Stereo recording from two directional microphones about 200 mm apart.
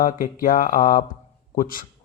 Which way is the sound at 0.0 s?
45° left (ahead or behind).